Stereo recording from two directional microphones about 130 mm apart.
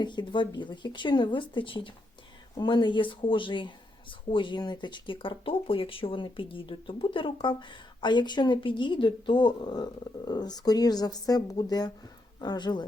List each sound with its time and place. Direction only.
0.0 s speech: 35° left (ahead or behind)